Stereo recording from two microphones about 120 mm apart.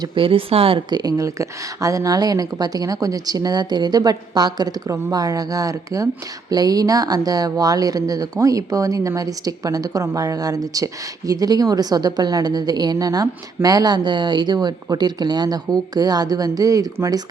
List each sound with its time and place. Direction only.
0.2 s a woman's voice: 50° right (ahead or behind); by 17.2 s 30° right (ahead or behind)